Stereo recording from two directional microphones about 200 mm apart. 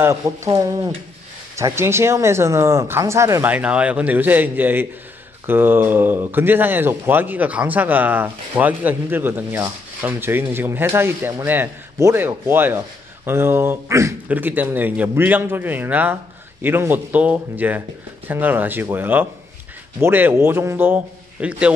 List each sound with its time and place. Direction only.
0.0 s speech: 15° right (ahead or behind)